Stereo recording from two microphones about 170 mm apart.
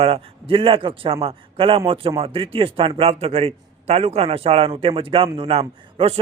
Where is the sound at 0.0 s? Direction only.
35° right (ahead or behind).